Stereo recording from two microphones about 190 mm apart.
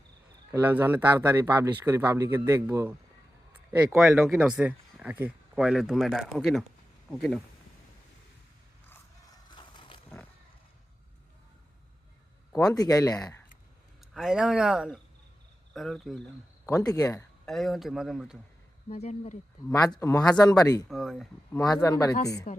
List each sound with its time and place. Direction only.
0.5 s speech: 10° right (ahead or behind); by 7.3 s 5° left (ahead or behind)
9.5 s a sound: 25° left (ahead or behind)
12.5 s speech: 20° left (ahead or behind)
14.1 s speech: 5° right (ahead or behind)
16.6 s speech: 20° left (ahead or behind)
17.4 s speech: centre (ahead or behind)
18.9 s speech: 35° left (ahead or behind)
19.7 s speech: 15° left (ahead or behind)
20.8 s speech: centre (ahead or behind)
21.6 s speech: 20° left (ahead or behind)
22.5 s speech: 45° left (ahead or behind)